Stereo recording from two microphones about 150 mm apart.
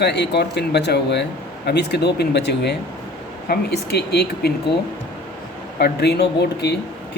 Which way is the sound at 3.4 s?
90° left.